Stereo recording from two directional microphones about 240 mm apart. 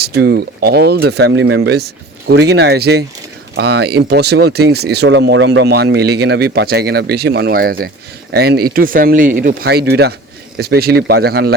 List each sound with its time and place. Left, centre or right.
0.0 s speech: right